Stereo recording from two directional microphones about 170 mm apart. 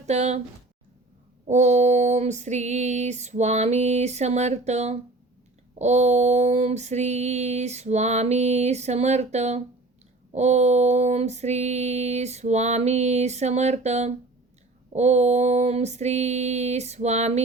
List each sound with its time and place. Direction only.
0.0 s speech: 40° right (ahead or behind)
1.5 s female singing: 45° right (ahead or behind)